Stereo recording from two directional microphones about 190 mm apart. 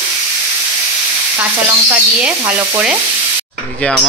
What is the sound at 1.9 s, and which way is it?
Sizzle, 5° right (ahead or behind).